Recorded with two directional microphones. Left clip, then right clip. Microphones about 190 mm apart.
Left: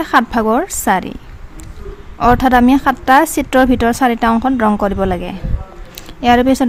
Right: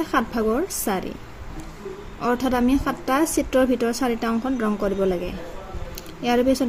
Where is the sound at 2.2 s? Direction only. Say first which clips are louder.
Left 12 dB; 65° left (ahead or behind).